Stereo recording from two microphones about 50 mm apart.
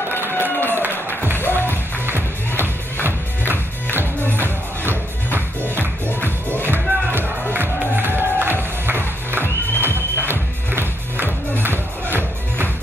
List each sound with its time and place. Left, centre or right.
0.4 s a sound: left
0.7 s a sound: right
1.3 s music: left
1.7 s music: right
6.2 s music: left
6.7 s music: right